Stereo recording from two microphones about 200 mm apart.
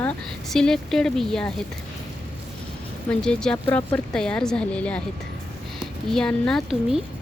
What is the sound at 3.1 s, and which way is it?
Speech, 5° left (ahead or behind).